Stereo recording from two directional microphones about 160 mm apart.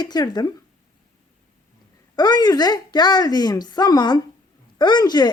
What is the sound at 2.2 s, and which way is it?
Speech, 25° left (ahead or behind).